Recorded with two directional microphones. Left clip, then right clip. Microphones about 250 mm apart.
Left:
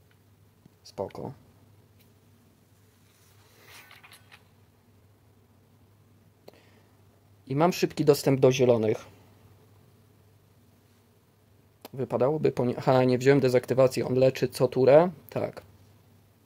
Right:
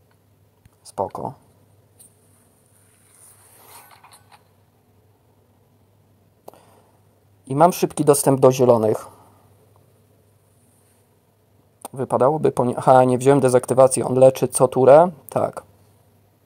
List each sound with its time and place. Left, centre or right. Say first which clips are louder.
3.6 s mechanisms: right 3 dB; centre
6.4 s a sound: right 9 dB; centre
7.4 s speech: right 9 dB; centre
11.8 s speech: right 8 dB; centre